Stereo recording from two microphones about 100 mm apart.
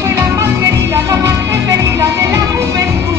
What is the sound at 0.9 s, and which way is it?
Music, 30° right (ahead or behind).